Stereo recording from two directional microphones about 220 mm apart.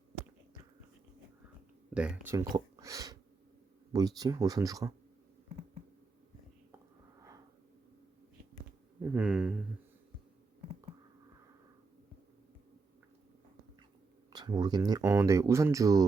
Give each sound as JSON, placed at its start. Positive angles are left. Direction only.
{"t": 1.9, "sound": "speech", "side_deg": -5}
{"t": 2.7, "sound": "a sound", "side_deg": -15}
{"t": 3.9, "sound": "speech", "side_deg": -15}
{"t": 9.0, "sound": "speech", "side_deg": -5}
{"t": 14.3, "sound": "speech", "side_deg": -20}